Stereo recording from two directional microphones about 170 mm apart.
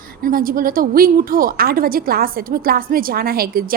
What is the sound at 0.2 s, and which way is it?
A woman's voice, 55° right (ahead or behind).